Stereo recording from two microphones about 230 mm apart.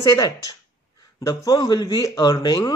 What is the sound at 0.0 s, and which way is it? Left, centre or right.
Speech, centre.